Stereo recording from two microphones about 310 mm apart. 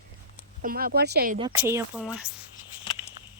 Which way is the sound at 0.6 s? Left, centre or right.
Right.